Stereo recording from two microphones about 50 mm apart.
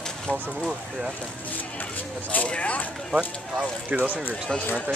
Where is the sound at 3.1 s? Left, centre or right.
Right.